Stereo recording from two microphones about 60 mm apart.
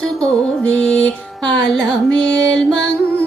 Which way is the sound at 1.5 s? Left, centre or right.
Centre.